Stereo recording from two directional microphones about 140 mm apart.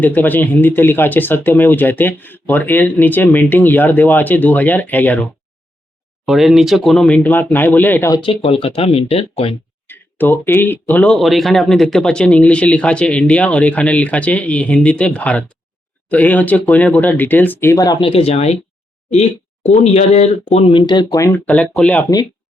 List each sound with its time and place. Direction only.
0.0 s speech: 10° left (ahead or behind)
6.2 s speech: centre (ahead or behind); by 8.1 s 15° left (ahead or behind)
8.1 s speech: 40° left (ahead or behind)
9.8 s speech: 15° left (ahead or behind)
18.0 s speech: 45° left (ahead or behind); by 21.3 s 25° left (ahead or behind)
21.3 s speech: 10° left (ahead or behind)